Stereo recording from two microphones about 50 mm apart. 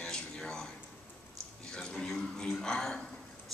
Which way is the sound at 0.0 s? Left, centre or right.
Centre.